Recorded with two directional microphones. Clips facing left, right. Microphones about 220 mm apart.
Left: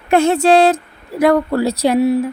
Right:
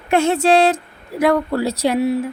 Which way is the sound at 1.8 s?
45° left (ahead or behind).